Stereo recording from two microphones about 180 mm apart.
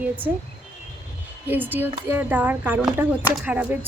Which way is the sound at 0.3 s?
10° right (ahead or behind).